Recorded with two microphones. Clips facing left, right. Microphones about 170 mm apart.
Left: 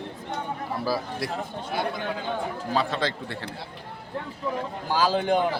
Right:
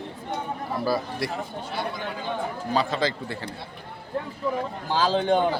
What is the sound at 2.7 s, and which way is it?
Speech, centre (ahead or behind).